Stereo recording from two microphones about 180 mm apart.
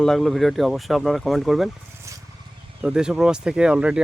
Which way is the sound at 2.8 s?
5° right (ahead or behind).